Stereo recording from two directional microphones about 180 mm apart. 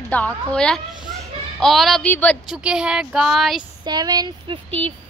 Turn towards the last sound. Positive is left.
turn(degrees=-25)  # may be behind; listen again after turning